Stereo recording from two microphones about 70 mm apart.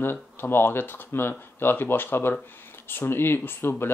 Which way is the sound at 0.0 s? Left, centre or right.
Left.